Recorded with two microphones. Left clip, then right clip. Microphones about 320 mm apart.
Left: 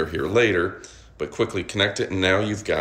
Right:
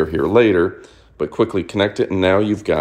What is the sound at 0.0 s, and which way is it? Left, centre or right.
Speech, centre.